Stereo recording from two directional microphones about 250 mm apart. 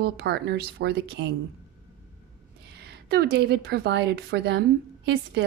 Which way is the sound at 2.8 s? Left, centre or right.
Right.